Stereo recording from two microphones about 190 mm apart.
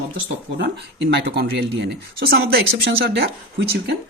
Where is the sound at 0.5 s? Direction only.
60° right (ahead or behind).